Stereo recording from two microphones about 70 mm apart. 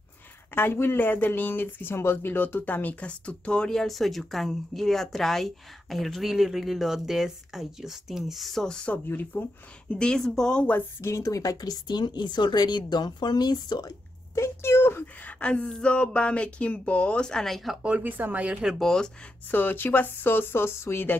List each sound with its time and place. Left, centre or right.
0.6 s speech: left; by 10.7 s centre
11.0 s speech: left
14.3 s a sound: left
15.2 s speech: centre
17.8 s speech: right
18.7 s speech: centre
19.5 s speech: left